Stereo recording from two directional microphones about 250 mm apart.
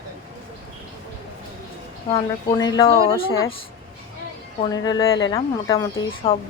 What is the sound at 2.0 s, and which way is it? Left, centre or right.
A woman's voice, centre.